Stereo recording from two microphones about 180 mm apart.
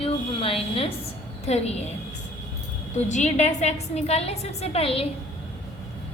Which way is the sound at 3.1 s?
40° left (ahead or behind).